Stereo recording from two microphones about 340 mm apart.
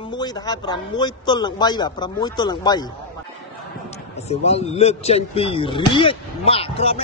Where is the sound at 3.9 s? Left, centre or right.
Centre.